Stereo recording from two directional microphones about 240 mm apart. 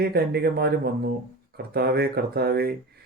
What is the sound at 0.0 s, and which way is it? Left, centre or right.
Speech, right.